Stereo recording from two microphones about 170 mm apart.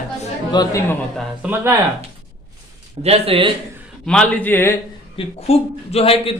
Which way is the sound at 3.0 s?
35° right (ahead or behind).